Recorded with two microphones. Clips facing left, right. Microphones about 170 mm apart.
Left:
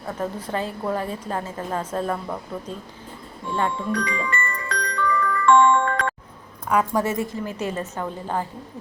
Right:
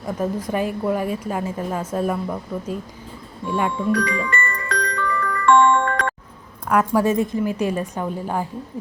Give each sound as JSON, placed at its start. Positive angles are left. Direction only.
{"t": 0.0, "sound": "a woman's voice", "side_deg": -10}
{"t": 3.9, "sound": "music", "side_deg": -60}
{"t": 6.7, "sound": "a woman's voice", "side_deg": -5}